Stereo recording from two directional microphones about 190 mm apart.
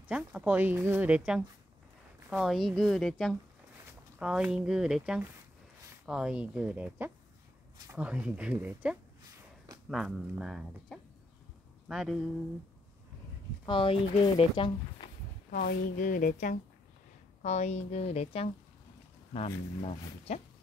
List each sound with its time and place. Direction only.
0.1 s speech: 5° right (ahead or behind)
13.7 s speech: 25° left (ahead or behind)
15.5 s a woman's voice: 45° left (ahead or behind)